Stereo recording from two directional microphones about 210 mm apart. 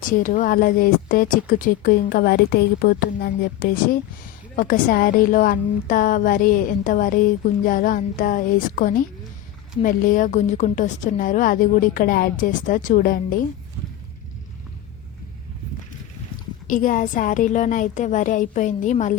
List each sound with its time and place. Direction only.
0.2 s a woman's voice: 40° left (ahead or behind)
16.6 s a woman's voice: 40° left (ahead or behind)